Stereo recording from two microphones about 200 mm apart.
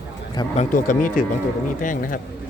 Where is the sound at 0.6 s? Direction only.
40° left (ahead or behind).